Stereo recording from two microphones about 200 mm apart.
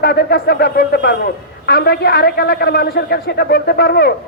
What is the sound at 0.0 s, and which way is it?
A man's voice, 50° left (ahead or behind).